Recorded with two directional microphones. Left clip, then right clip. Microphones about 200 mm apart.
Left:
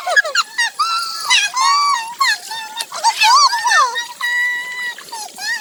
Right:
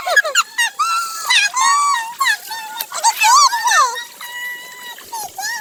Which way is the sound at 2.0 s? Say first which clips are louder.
Left 1 dB; 45° right (ahead or behind).